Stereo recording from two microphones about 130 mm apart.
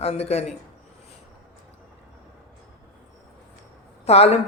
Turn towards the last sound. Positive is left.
turn(degrees=55)  # may be behind; listen again after turning